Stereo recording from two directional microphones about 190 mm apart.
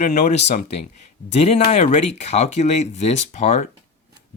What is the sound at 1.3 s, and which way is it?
Speech, 35° left (ahead or behind).